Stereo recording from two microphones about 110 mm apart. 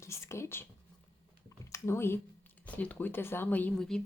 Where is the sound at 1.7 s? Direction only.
25° left (ahead or behind).